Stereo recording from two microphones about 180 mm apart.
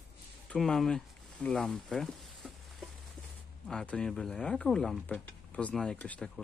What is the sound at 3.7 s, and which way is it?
Speech, 5° left (ahead or behind).